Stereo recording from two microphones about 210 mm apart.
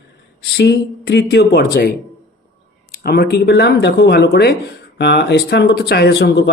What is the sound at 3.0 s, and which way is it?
Speech, 50° left (ahead or behind).